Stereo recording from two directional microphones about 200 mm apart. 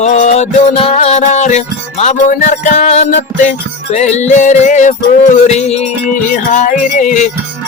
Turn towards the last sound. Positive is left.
turn(degrees=40)  # may be behind; listen again after turning